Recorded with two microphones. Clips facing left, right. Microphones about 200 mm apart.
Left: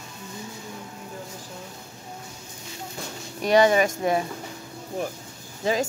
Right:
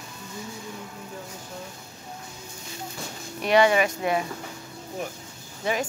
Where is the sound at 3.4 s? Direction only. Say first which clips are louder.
Left 1 dB; 40° left (ahead or behind).